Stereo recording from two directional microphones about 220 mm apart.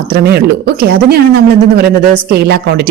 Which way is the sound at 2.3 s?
45° right (ahead or behind).